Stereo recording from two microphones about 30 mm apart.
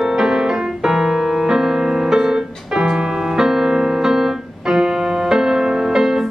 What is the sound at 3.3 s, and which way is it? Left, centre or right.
Keyboard, centre.